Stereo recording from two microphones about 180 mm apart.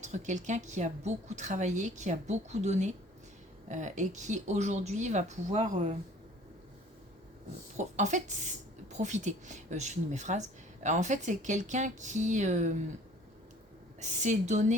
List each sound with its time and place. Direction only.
0.0 s speech: 40° right (ahead or behind)
7.8 s speech: 40° right (ahead or behind)
14.0 s speech: 40° right (ahead or behind)